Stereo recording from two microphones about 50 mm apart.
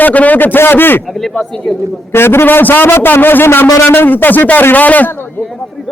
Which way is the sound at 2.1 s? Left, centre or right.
Left.